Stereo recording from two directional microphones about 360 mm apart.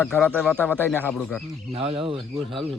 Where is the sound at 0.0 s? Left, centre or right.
Centre.